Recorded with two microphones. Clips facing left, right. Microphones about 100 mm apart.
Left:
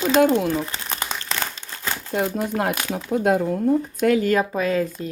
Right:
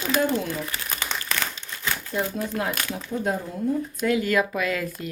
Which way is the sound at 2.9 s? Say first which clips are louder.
Left 7 dB; 90° left.